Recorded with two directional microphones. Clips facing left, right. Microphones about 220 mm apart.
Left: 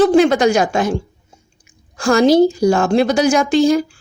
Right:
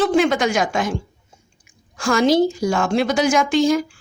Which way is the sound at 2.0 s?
40° left (ahead or behind).